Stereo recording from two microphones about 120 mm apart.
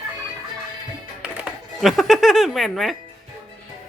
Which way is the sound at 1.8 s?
Centre (ahead or behind).